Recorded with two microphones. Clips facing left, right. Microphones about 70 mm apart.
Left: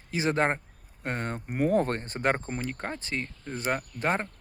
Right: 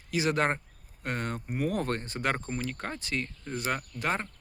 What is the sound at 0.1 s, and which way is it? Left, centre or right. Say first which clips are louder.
Speech: left 1 dB; left.